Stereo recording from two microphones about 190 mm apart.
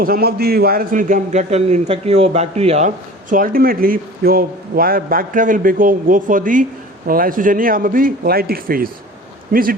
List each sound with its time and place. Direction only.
0.0 s a man's voice: 50° right (ahead or behind)